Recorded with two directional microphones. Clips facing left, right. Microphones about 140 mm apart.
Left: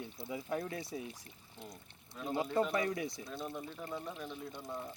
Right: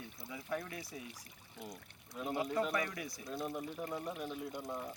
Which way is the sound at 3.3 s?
5° right (ahead or behind).